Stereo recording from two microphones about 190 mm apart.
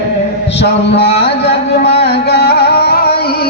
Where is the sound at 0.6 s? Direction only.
60° left (ahead or behind).